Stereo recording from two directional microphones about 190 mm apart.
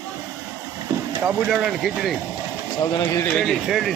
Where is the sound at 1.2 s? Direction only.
10° right (ahead or behind).